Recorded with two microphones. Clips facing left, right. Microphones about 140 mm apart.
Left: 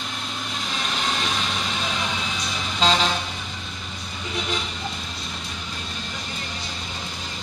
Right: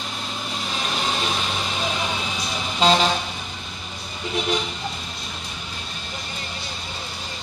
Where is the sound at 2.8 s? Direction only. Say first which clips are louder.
Right 3 dB; 10° right (ahead or behind).